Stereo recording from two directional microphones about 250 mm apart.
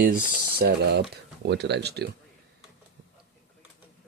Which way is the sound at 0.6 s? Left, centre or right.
Right.